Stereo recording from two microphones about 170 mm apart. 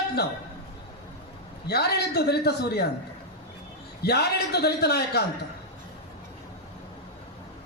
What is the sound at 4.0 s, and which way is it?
A man's voice, 70° left (ahead or behind).